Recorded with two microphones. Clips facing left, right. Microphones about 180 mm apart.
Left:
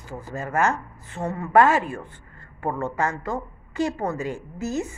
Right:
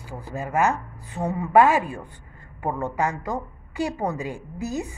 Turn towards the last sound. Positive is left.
turn(degrees=-15)  # may be behind; listen again after turning